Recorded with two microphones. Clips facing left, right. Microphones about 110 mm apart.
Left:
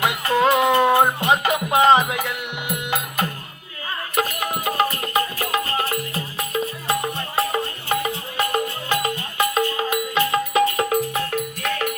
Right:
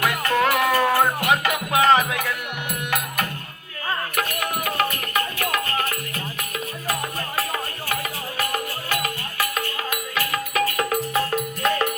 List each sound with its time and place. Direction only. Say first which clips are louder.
0.0 s music: left 2 dB; 25° left (ahead or behind)
11.3 s music: right 2 dB; 30° right (ahead or behind)